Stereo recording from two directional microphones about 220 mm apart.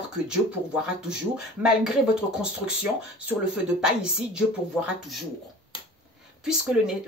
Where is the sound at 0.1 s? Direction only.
5° right (ahead or behind).